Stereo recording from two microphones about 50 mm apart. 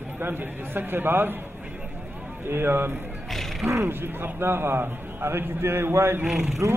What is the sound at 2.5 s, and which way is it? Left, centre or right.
Speech, right.